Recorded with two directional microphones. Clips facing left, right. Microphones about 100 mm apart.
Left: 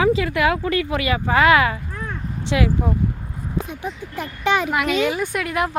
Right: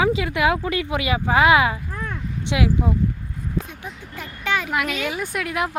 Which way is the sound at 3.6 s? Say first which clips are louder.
Left 6 dB; 20° left (ahead or behind).